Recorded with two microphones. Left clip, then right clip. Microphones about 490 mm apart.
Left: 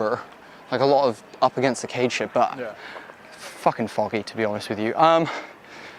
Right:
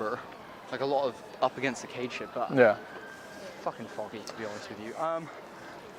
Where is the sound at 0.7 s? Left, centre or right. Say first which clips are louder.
Left 10 dB; left.